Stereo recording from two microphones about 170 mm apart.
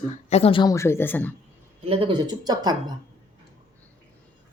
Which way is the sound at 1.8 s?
35° right (ahead or behind).